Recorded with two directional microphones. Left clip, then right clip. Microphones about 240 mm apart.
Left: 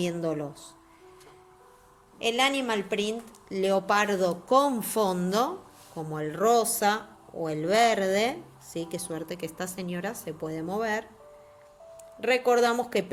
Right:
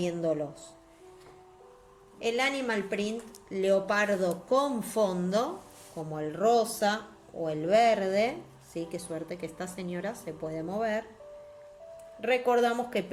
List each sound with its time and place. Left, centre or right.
0.0 s speech: left
2.1 s speech: left
12.2 s speech: left